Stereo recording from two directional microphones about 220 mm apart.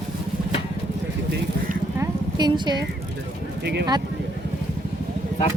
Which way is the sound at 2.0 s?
20° right (ahead or behind).